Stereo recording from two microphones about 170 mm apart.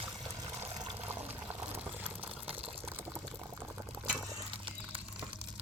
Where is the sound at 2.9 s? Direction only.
10° right (ahead or behind).